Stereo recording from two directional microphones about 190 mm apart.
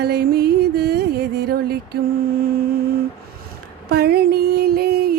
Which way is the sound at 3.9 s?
55° right (ahead or behind).